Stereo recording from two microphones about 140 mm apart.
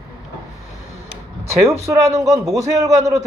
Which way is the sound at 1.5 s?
20° right (ahead or behind).